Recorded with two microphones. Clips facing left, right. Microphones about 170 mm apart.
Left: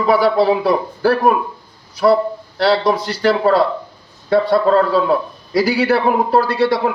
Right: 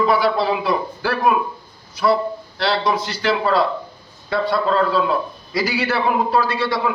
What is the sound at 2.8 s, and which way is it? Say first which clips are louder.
A man's voice: left 5 dB; 35° left (ahead or behind).